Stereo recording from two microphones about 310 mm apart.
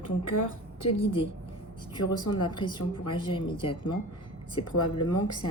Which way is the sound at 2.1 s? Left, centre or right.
Centre.